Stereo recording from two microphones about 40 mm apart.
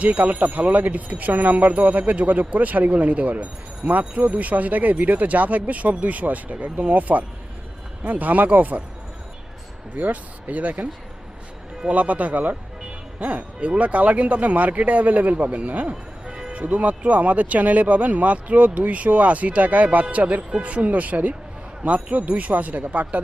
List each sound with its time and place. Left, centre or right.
0.0 s speech: right
9.9 s speech: right
11.9 s speech: right
15.9 s music: right
16.5 s speech: right